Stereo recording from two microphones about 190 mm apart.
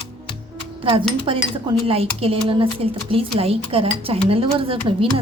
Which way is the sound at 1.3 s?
30° right (ahead or behind).